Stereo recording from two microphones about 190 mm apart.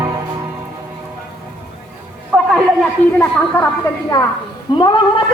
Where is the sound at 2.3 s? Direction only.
Centre (ahead or behind).